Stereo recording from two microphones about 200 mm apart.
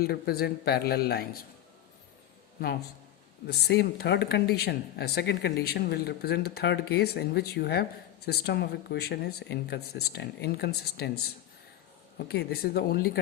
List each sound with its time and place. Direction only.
0.0 s speech: 50° left (ahead or behind)
3.4 s speech: 55° left (ahead or behind)
12.1 s speech: 55° left (ahead or behind)